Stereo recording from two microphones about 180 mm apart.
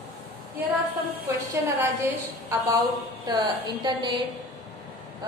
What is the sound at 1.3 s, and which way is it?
A woman's voice, 15° right (ahead or behind).